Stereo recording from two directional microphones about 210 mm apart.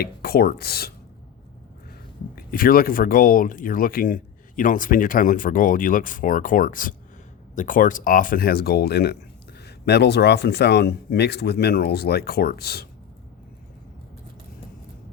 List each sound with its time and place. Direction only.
0.0 s speech: 45° left (ahead or behind)
2.3 s speech: 45° left (ahead or behind)